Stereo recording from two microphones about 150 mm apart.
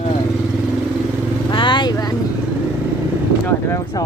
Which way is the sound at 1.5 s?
30° left (ahead or behind).